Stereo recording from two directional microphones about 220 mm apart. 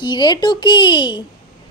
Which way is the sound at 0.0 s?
20° left (ahead or behind).